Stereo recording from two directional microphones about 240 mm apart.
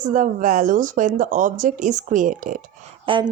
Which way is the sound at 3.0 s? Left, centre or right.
Centre.